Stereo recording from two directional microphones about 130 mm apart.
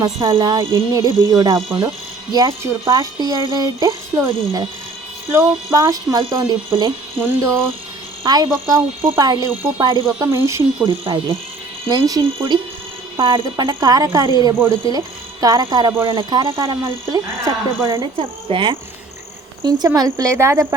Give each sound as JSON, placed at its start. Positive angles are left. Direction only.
{"t": 0.0, "sound": "speech", "side_deg": -35}
{"t": 5.3, "sound": "speech", "side_deg": -20}
{"t": 6.1, "sound": "speech", "side_deg": -35}
{"t": 7.2, "sound": "speech", "side_deg": -20}
{"t": 8.2, "sound": "speech", "side_deg": -30}
{"t": 9.8, "sound": "speech", "side_deg": -40}
{"t": 10.3, "sound": "speech", "side_deg": -20}
{"t": 10.8, "sound": "speech", "side_deg": -40}
{"t": 11.9, "sound": "speech", "side_deg": -30}
{"t": 13.1, "sound": "speech", "side_deg": -40}
{"t": 16.6, "sound": "speech", "side_deg": -25}
{"t": 19.6, "sound": "speech", "side_deg": -30}